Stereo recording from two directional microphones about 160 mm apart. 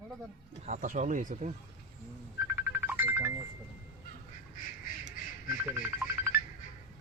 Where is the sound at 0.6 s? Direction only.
50° right (ahead or behind).